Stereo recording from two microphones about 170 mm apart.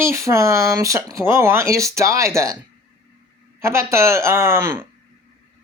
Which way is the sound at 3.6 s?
15° right (ahead or behind).